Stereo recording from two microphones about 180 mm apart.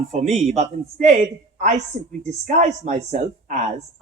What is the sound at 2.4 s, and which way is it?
A woman's voice, 40° right (ahead or behind).